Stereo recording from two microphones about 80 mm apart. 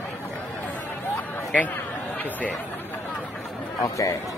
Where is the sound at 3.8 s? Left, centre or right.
Left.